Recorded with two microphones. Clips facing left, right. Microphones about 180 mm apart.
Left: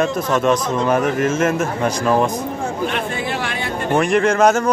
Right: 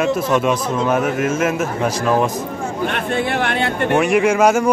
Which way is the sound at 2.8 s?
60° right (ahead or behind).